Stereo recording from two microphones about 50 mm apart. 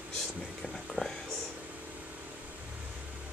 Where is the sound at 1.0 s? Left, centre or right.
Left.